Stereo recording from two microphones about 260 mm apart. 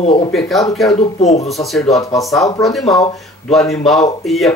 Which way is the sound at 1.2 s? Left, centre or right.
Left.